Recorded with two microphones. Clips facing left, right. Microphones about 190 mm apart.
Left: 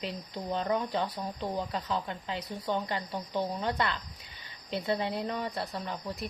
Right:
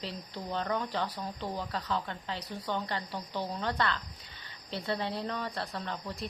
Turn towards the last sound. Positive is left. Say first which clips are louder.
# left 2 dB
turn(degrees=10)  # may be behind; listen again after turning